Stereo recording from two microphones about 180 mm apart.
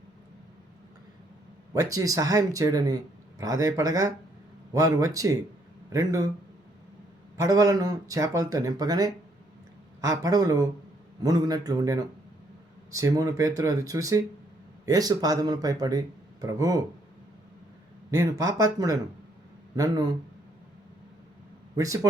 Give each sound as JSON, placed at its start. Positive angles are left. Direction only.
{"t": 1.7, "sound": "speech", "side_deg": -20}
{"t": 7.3, "sound": "speech", "side_deg": -20}
{"t": 10.2, "sound": "speech", "side_deg": -20}
{"t": 18.1, "sound": "speech", "side_deg": -20}